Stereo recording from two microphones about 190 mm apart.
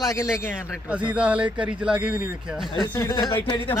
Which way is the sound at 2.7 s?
20° left (ahead or behind).